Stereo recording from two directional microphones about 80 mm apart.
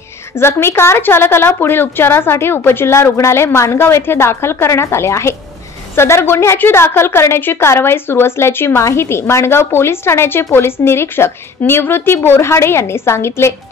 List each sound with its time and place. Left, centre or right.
0.4 s a woman's voice: left